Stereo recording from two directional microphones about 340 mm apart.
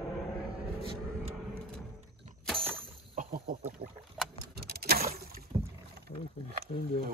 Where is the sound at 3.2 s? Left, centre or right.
Right.